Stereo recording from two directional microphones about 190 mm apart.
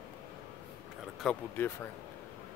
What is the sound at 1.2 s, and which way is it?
Speech, 5° left (ahead or behind).